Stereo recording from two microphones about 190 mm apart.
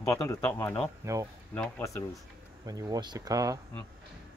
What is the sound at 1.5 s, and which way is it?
Speech, 10° left (ahead or behind).